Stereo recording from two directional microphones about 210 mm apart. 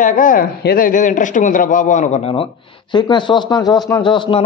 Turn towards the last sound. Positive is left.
turn(degrees=25)  # may be behind; listen again after turning